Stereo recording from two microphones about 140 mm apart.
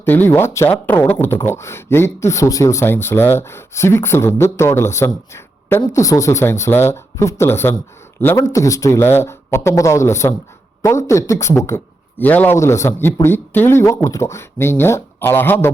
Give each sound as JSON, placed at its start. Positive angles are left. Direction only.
{"t": 0.0, "sound": "speech", "side_deg": 15}